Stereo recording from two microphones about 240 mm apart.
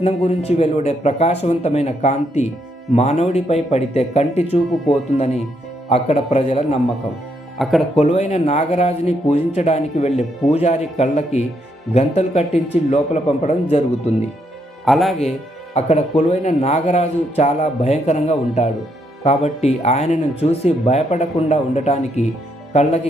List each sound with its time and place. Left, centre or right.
0.0 s speech: left
7.6 s speech: centre
7.9 s speech: left
14.8 s speech: centre
15.7 s speech: left